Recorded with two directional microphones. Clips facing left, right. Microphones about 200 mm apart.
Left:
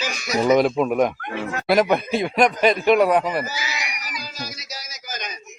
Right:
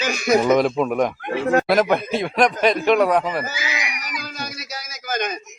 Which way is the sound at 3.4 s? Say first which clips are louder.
Right 2 dB; 55° right (ahead or behind).